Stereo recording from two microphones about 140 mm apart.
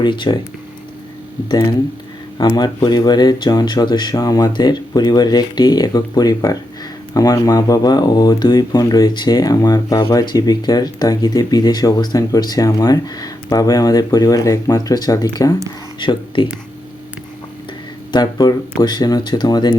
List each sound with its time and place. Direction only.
0.0 s speech: 35° left (ahead or behind)
2.4 s speech: 30° left (ahead or behind)
18.1 s speech: 30° left (ahead or behind)